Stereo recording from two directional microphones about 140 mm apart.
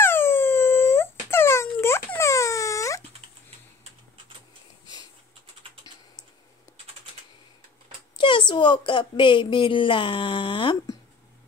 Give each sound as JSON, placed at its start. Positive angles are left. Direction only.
{"t": 0.0, "sound": "wail", "side_deg": 15}
{"t": 8.2, "sound": "a woman's voice", "side_deg": 35}